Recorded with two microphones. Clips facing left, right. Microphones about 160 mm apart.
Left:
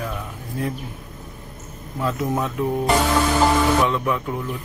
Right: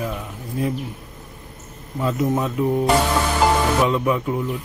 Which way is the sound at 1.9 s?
5° right (ahead or behind).